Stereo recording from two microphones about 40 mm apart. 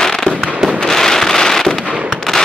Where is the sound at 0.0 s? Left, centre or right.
Centre.